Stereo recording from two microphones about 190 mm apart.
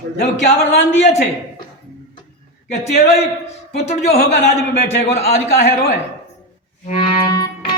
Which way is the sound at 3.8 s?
35° left (ahead or behind).